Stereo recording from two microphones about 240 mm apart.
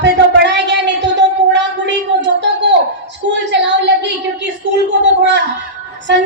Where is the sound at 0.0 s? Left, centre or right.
Right.